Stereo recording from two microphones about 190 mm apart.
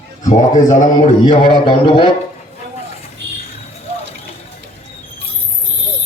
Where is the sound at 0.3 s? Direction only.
40° left (ahead or behind).